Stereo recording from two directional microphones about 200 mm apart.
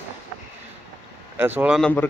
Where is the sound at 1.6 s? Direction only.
Centre (ahead or behind).